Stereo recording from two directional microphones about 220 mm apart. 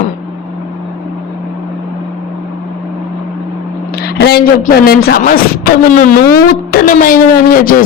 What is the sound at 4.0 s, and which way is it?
Speech, 45° left (ahead or behind).